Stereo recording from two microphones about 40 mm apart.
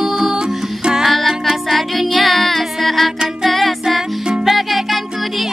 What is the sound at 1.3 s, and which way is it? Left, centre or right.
Music, centre.